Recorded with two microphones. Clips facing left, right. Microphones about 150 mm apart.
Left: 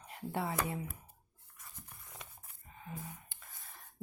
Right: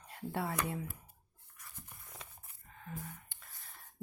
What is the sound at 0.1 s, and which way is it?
Speech, 20° left (ahead or behind).